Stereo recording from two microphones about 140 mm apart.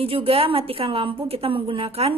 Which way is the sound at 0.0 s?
40° right (ahead or behind).